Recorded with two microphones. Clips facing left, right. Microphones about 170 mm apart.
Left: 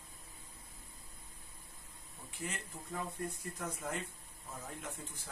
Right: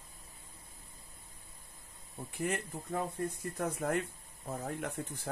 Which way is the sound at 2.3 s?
55° right (ahead or behind).